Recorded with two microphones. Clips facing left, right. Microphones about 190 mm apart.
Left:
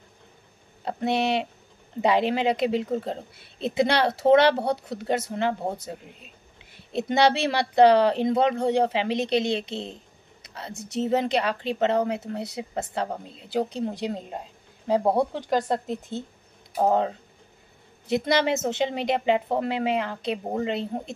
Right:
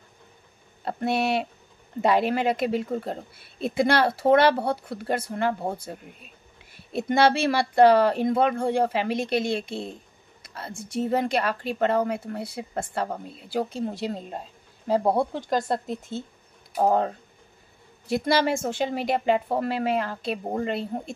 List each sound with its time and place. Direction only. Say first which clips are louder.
0.8 s speech: even; 20° left (ahead or behind)
4.3 s speech: left 1 dB; 55° right (ahead or behind)
4.6 s speech: left 1 dB; 20° left (ahead or behind)
18.0 s speech: even; 20° left (ahead or behind)